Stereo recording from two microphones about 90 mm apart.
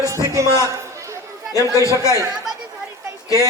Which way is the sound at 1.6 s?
35° left (ahead or behind).